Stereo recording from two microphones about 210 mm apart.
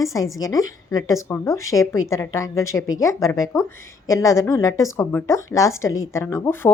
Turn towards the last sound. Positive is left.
turn(degrees=10)  # may be behind; listen again after turning